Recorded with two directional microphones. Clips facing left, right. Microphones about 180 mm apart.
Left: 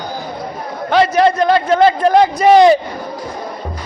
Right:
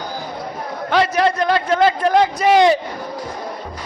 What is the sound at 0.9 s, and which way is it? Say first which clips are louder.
A man's voice: left 5 dB; 30° left (ahead or behind).